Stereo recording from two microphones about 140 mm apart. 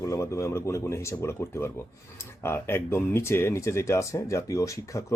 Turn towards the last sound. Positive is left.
turn(degrees=20)  # may be behind; listen again after turning